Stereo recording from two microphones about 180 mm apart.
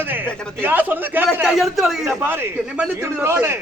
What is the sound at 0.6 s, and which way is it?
A man's voice, 10° right (ahead or behind).